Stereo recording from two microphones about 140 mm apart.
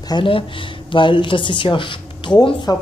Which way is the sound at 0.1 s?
40° left (ahead or behind).